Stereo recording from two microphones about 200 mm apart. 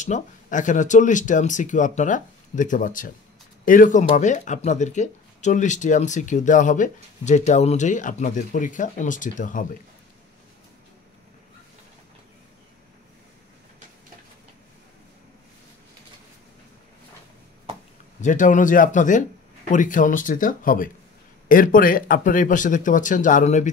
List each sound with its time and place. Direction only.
0.0 s speech: 40° left (ahead or behind)
18.2 s speech: 40° left (ahead or behind)